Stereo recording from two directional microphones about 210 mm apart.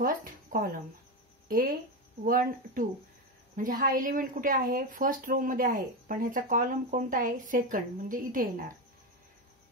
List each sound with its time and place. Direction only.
0.0 s speech: 40° right (ahead or behind)
2.2 s a woman's voice: 40° right (ahead or behind)